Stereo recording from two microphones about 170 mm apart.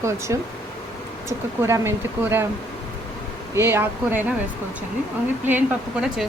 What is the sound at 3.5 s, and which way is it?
Speech, 15° right (ahead or behind).